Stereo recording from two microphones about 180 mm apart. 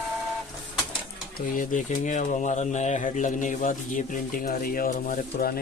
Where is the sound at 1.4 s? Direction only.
45° left (ahead or behind).